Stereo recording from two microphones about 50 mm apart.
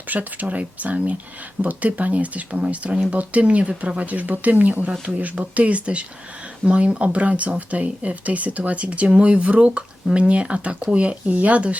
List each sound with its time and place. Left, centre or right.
0.1 s speech: right